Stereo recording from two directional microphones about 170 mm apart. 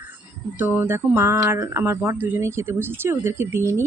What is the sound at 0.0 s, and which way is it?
Speech, 10° right (ahead or behind).